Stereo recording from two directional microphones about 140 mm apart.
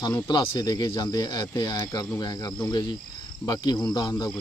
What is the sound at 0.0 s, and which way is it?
Speech, 30° left (ahead or behind).